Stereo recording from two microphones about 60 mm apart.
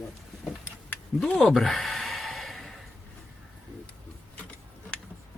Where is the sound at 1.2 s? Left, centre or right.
Centre.